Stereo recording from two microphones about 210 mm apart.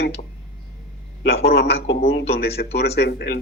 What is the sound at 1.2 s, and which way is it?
Speech, 50° left (ahead or behind).